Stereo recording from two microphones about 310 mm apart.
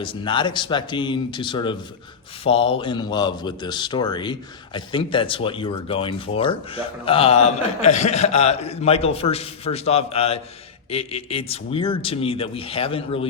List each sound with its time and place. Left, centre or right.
0.0 s a man's voice: centre